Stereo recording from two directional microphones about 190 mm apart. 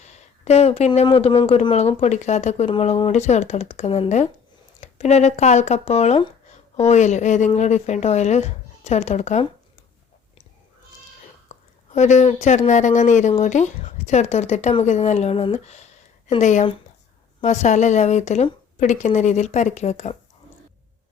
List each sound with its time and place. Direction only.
0.0 s speech: 35° left (ahead or behind)
11.9 s speech: 40° left (ahead or behind)